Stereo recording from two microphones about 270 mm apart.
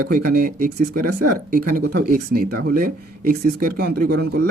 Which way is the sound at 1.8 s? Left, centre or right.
Right.